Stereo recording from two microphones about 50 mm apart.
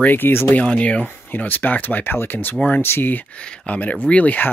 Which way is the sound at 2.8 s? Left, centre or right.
Left.